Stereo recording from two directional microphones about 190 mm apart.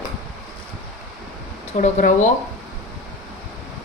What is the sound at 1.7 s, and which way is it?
Speech, 40° left (ahead or behind).